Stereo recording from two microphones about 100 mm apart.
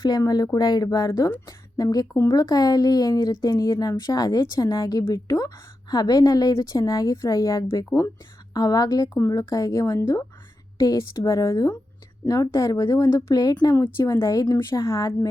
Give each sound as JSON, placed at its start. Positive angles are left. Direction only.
{"t": 0.0, "sound": "a woman's voice", "side_deg": 40}
{"t": 13.3, "sound": "speech", "side_deg": 40}
{"t": 13.9, "sound": "a woman's voice", "side_deg": 30}